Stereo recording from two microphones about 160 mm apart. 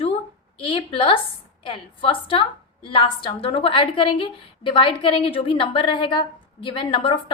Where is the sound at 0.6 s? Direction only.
35° left (ahead or behind).